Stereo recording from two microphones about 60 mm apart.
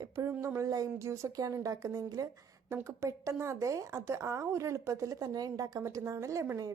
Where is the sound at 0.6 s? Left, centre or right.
Right.